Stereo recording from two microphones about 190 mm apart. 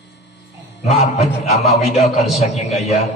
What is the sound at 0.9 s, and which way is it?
A man's voice, 35° left (ahead or behind).